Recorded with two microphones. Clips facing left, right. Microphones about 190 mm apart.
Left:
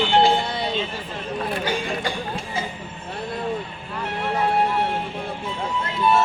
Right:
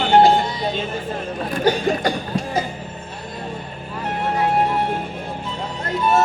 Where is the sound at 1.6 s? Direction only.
40° right (ahead or behind).